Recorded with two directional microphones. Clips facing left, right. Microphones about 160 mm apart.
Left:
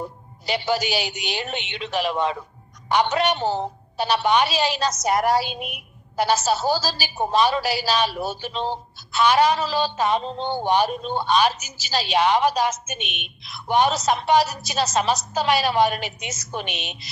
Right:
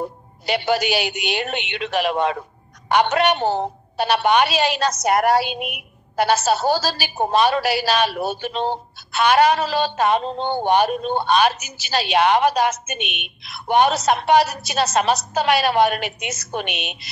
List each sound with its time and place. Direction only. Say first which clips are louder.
0.5 s a woman's voice: right 3 dB; 60° right (ahead or behind)